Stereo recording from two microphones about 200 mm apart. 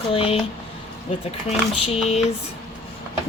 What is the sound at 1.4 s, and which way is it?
Speech, 30° left (ahead or behind).